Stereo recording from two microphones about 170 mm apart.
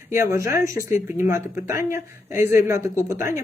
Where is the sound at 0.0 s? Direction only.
15° right (ahead or behind).